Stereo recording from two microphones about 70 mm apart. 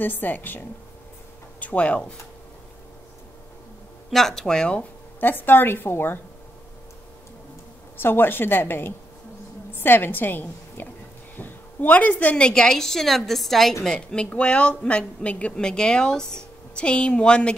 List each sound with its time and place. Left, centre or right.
0.0 s a woman's voice: left
4.1 s a woman's voice: centre
5.2 s a woman's voice: left
8.0 s a woman's voice: left; by 13.7 s centre
13.8 s a woman's voice: centre